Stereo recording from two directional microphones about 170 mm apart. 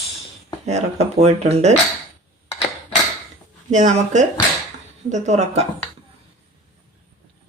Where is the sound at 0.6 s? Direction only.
40° right (ahead or behind).